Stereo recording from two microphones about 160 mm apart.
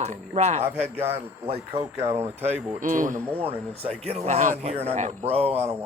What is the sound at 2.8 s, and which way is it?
Speech, 55° right (ahead or behind).